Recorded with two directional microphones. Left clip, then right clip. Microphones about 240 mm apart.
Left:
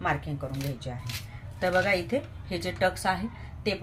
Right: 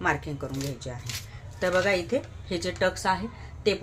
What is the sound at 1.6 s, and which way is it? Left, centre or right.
A woman's voice, centre.